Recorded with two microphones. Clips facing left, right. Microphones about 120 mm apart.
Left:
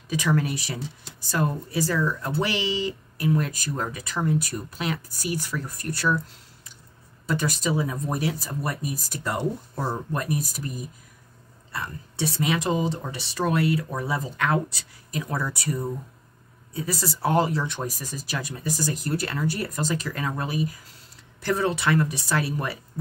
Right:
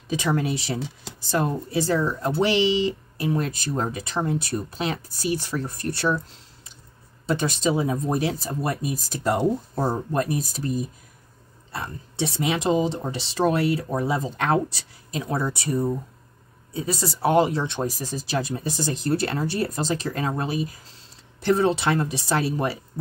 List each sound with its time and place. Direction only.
0.1 s speech: 25° right (ahead or behind)
7.2 s speech: 25° right (ahead or behind)